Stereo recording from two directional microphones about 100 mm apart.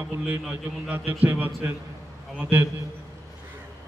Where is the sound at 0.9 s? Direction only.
20° right (ahead or behind).